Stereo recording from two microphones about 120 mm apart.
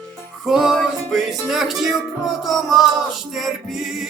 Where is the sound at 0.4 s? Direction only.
5° right (ahead or behind).